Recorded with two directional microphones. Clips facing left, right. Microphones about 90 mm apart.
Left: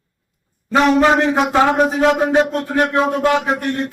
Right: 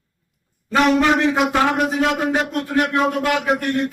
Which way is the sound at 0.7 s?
30° left (ahead or behind).